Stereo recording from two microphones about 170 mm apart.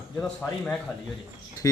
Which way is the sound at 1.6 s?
15° left (ahead or behind).